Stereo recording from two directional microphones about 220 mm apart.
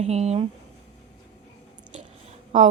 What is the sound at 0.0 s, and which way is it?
Speech, 30° right (ahead or behind).